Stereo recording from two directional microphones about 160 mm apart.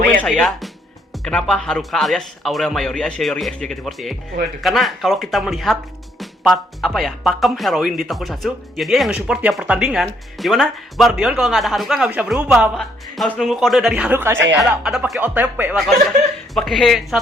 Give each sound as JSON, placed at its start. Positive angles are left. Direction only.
{"t": 0.2, "sound": "speech", "side_deg": 0}
{"t": 14.6, "sound": "speech", "side_deg": 0}
{"t": 16.6, "sound": "speech", "side_deg": 0}